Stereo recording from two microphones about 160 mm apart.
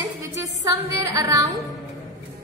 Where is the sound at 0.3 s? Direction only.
20° right (ahead or behind).